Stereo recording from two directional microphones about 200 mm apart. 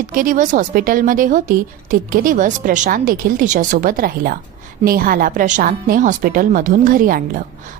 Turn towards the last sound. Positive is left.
turn(degrees=-45)  # may be behind; listen again after turning